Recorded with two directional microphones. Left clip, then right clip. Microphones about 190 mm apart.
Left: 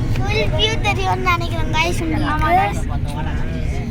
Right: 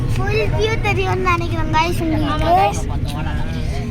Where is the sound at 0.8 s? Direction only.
15° right (ahead or behind).